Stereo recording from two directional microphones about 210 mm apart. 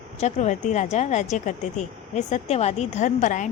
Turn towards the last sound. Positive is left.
turn(degrees=35)  # may be behind; listen again after turning